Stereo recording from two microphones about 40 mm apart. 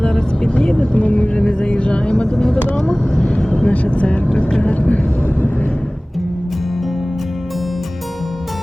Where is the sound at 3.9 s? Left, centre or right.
Left.